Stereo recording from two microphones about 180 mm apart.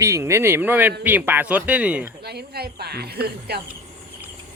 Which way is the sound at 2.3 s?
60° right (ahead or behind).